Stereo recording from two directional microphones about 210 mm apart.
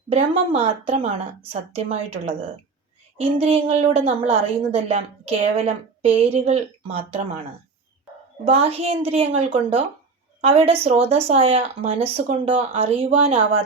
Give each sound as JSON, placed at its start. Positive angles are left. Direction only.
{"t": 0.1, "sound": "speech", "side_deg": -25}
{"t": 8.4, "sound": "speech", "side_deg": -30}